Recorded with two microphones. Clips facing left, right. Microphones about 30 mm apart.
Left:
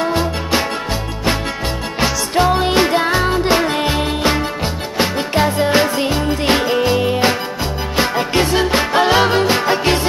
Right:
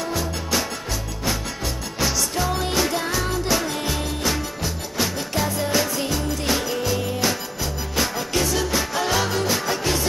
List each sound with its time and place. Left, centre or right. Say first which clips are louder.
0.0 s music: left 8 dB; left
2.0 s music: left 8 dB; left